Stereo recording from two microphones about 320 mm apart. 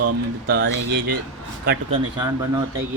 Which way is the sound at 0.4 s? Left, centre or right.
Right.